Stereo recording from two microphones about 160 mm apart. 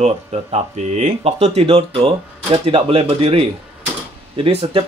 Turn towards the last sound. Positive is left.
turn(degrees=-35)  # may be behind; listen again after turning